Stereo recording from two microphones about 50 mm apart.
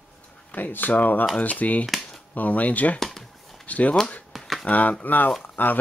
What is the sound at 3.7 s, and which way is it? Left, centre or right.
Speech, left.